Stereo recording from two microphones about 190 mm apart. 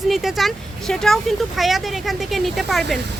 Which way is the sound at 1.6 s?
Centre (ahead or behind).